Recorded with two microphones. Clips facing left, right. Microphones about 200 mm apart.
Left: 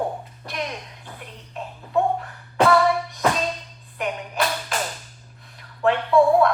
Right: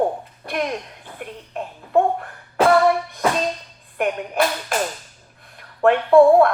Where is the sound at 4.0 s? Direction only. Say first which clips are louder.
Right 5 dB; 55° right (ahead or behind).